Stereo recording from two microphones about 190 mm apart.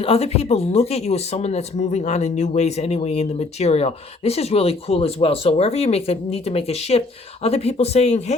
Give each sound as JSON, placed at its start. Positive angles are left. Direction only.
{"t": 0.0, "sound": "speech", "side_deg": 30}